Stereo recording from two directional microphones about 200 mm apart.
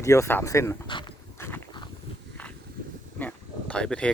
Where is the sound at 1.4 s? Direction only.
10° left (ahead or behind).